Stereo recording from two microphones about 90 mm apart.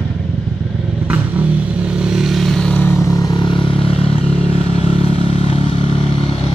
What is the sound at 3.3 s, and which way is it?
Vehicle, 60° left (ahead or behind).